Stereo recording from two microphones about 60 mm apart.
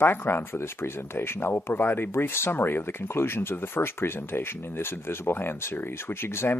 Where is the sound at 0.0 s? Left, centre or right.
Left.